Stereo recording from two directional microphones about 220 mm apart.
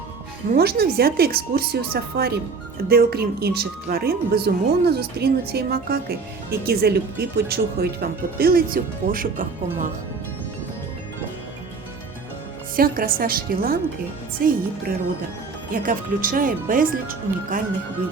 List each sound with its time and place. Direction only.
0.5 s a woman's voice: 45° right (ahead or behind)
12.7 s speech: 40° right (ahead or behind)
15.7 s speech: 40° right (ahead or behind)